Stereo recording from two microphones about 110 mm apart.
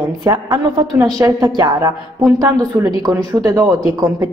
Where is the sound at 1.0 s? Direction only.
35° right (ahead or behind).